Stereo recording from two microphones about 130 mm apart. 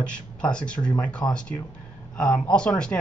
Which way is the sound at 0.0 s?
10° left (ahead or behind).